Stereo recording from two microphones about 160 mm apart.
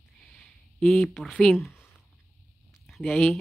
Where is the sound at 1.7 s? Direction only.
15° left (ahead or behind).